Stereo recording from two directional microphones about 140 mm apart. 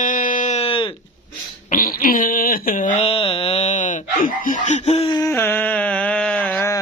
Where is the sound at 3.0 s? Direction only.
45° left (ahead or behind); by 4.5 s 70° left (ahead or behind).